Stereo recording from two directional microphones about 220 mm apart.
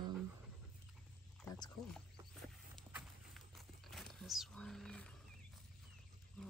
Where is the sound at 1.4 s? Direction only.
20° left (ahead or behind).